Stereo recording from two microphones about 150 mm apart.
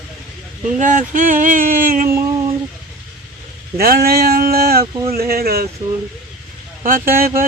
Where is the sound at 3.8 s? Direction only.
90° right.